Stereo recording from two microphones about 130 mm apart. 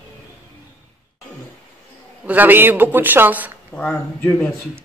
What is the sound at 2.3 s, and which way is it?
Speech, 15° right (ahead or behind).